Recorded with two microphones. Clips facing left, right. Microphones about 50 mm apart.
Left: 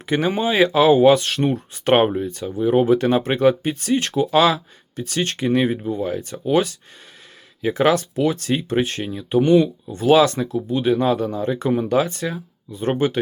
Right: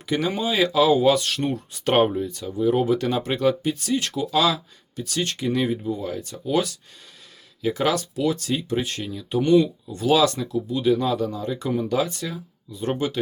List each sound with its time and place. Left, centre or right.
0.0 s speech: left